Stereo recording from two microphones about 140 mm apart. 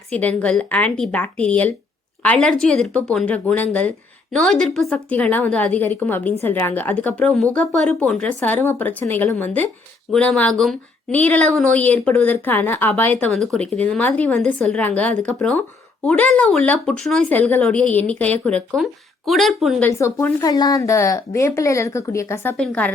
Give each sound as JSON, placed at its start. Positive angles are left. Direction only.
{"t": 0.1, "sound": "speech", "side_deg": 10}
{"t": 19.8, "sound": "a woman's voice", "side_deg": 20}
{"t": 22.5, "sound": "speech", "side_deg": 10}